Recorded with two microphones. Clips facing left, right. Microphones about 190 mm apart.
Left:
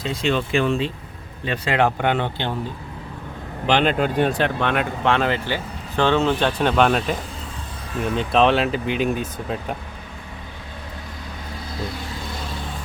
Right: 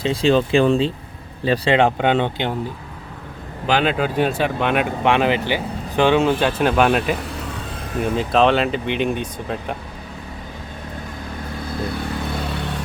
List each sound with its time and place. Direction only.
0.0 s speech: 30° right (ahead or behind)
3.7 s speech: 5° right (ahead or behind)
7.0 s speech: 65° right (ahead or behind)
8.0 s speech: 5° right (ahead or behind)
11.9 s vehicle: 60° right (ahead or behind)